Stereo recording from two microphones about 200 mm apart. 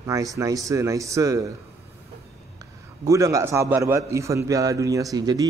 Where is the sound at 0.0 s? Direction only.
15° right (ahead or behind).